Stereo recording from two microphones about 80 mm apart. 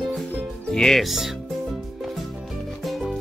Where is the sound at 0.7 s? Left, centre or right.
Centre.